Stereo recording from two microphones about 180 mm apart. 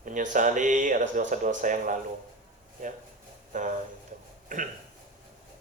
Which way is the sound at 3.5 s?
45° right (ahead or behind).